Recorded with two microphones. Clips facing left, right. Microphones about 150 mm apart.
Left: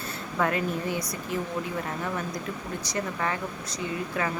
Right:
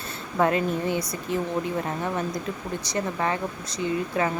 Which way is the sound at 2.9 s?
25° right (ahead or behind).